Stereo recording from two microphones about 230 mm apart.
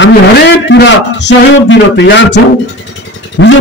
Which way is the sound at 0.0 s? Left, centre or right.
Left.